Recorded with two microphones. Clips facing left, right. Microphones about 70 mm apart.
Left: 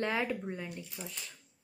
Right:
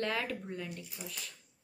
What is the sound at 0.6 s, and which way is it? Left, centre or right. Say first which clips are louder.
Speech: left 1 dB; centre.